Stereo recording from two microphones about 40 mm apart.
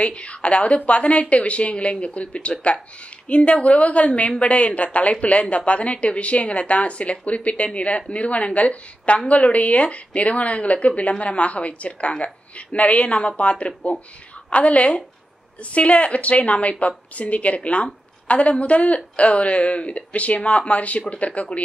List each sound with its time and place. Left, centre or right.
0.0 s a woman's voice: left